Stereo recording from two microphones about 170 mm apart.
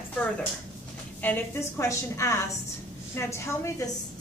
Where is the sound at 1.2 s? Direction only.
15° left (ahead or behind).